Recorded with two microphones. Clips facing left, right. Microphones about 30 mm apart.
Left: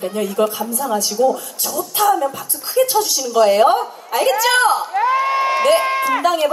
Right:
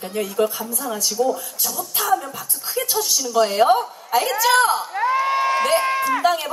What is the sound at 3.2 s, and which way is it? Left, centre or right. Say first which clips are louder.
Speech: left 4 dB; centre.